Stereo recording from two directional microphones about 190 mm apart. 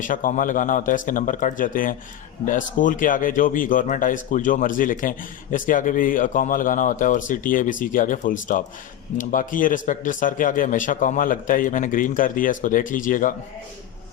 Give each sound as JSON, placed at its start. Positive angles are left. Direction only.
{"t": 0.0, "sound": "speech", "side_deg": 45}